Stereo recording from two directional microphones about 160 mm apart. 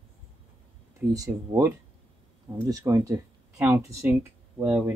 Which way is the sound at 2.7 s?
20° right (ahead or behind).